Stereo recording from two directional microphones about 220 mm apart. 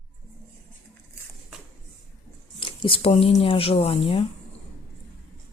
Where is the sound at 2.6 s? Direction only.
25° left (ahead or behind).